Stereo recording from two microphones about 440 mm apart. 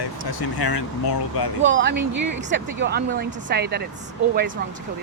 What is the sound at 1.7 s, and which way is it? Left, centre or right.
Speech, right.